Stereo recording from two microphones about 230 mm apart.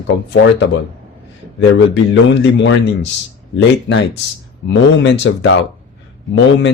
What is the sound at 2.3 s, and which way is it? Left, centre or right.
Speech, left.